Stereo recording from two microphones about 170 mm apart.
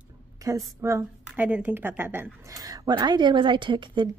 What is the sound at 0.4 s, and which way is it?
A woman's voice, 20° right (ahead or behind).